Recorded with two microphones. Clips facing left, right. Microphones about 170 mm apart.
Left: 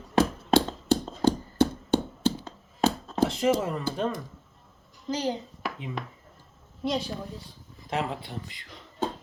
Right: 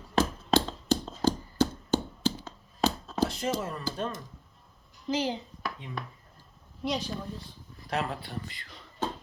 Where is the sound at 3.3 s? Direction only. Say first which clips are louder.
Left 7 dB; 25° left (ahead or behind).